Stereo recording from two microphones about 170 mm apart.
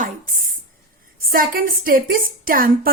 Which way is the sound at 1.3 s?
55° right (ahead or behind).